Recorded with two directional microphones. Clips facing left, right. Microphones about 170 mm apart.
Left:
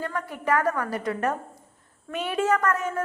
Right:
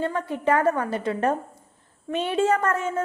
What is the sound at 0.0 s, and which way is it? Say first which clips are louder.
A woman's voice: right 5 dB; 25° right (ahead or behind).